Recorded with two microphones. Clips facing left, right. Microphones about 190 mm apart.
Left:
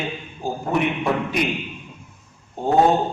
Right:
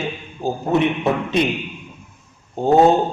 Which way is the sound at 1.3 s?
25° right (ahead or behind).